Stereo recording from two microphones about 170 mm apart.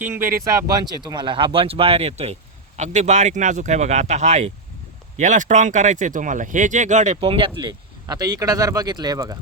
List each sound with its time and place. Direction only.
0.7 s speech: 25° right (ahead or behind); by 7.2 s 45° right (ahead or behind)
7.2 s speech: 30° right (ahead or behind)